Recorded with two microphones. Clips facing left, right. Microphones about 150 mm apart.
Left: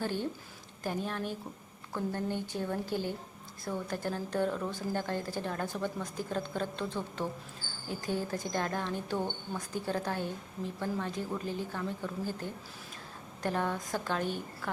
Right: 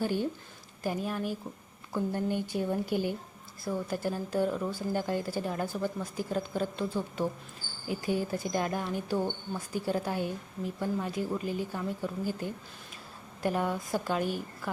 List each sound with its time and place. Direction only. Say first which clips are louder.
0.0 s a woman's voice: right 4 dB; 10° right (ahead or behind)